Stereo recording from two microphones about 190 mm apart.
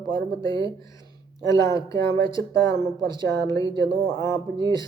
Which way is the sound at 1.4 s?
15° left (ahead or behind).